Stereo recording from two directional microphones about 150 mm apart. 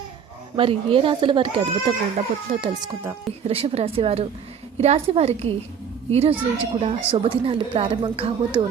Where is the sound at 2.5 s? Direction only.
45° right (ahead or behind).